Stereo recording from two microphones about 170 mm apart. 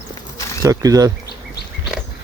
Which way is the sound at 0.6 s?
20° right (ahead or behind).